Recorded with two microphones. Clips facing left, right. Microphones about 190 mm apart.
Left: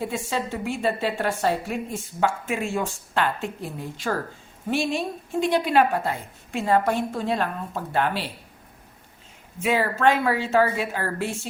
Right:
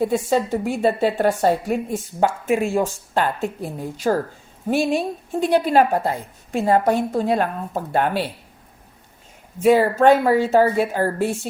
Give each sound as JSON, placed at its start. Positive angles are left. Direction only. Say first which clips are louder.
{"t": 0.1, "sound": "a woman's voice", "louder": "right 8 dB", "side_deg": -40}
{"t": 9.6, "sound": "a woman's voice", "louder": "right 8 dB", "side_deg": -40}